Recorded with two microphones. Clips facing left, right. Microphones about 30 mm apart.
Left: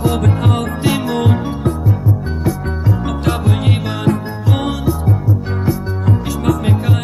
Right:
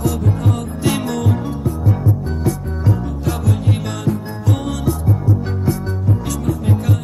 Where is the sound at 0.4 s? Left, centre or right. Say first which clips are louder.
Left 4 dB; left.